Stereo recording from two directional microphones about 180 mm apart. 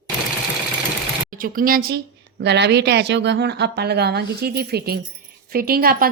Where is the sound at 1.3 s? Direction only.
50° right (ahead or behind).